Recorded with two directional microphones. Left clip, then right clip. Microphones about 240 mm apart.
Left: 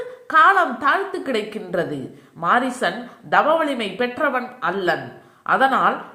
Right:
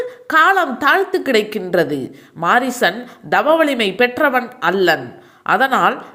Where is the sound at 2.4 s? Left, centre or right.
Right.